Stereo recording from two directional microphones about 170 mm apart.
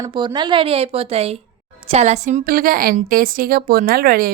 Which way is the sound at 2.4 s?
55° right (ahead or behind).